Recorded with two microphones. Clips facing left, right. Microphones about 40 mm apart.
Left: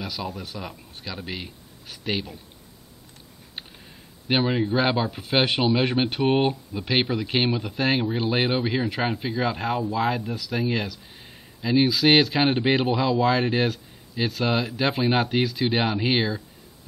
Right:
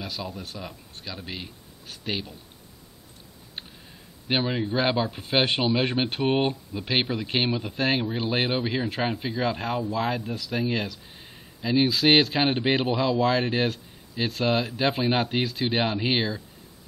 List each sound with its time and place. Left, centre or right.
0.0 s speech: centre
4.3 s speech: centre